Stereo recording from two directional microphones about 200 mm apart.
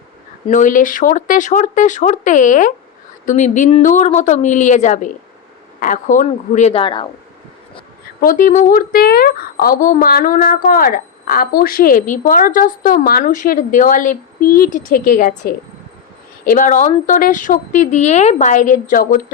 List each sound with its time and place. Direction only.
0.4 s a woman's voice: 40° left (ahead or behind)
8.2 s a woman's voice: 45° left (ahead or behind)